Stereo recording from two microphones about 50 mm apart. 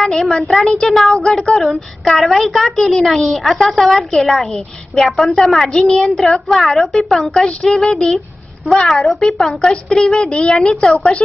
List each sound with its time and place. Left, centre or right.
0.0 s a woman's voice: centre
5.7 s a woman's voice: centre